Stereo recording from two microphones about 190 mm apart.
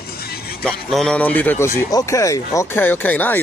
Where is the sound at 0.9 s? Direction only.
Centre (ahead or behind).